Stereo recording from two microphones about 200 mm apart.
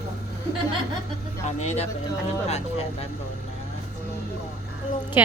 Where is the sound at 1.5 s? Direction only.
35° left (ahead or behind).